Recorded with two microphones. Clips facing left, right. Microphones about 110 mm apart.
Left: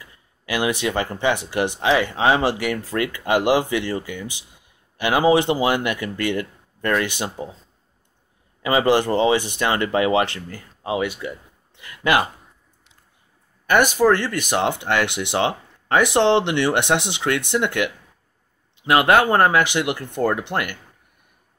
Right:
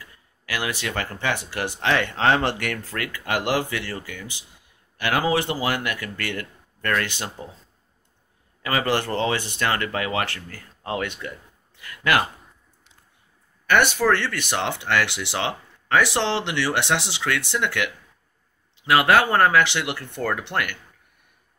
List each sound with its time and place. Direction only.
0.0 s speech: 20° left (ahead or behind)
8.6 s speech: 20° left (ahead or behind)
11.7 s speech: 20° left (ahead or behind)
13.7 s speech: 10° left (ahead or behind)